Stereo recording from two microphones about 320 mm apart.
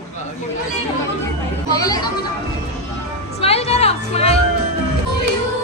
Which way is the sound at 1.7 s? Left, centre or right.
Centre.